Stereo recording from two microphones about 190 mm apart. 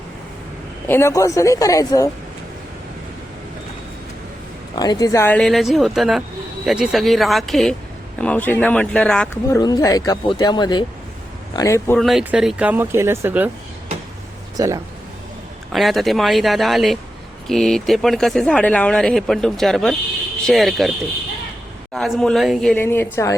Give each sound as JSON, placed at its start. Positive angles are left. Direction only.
{"t": 0.9, "sound": "a woman's voice", "side_deg": 15}
{"t": 4.7, "sound": "speech", "side_deg": 20}
{"t": 5.4, "sound": "a woman's voice", "side_deg": 0}
{"t": 9.5, "sound": "a woman's voice", "side_deg": 20}
{"t": 11.9, "sound": "speech", "side_deg": 0}
{"t": 14.5, "sound": "speech", "side_deg": -15}
{"t": 15.7, "sound": "speech", "side_deg": 0}
{"t": 21.9, "sound": "speech", "side_deg": 0}